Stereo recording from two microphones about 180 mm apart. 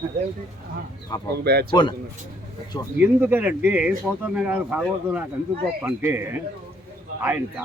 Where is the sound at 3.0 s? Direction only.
10° right (ahead or behind).